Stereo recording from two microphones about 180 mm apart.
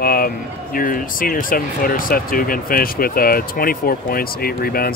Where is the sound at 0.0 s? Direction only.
55° left (ahead or behind).